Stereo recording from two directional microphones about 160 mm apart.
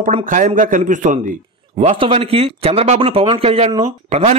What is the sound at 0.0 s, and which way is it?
Speech, 55° right (ahead or behind).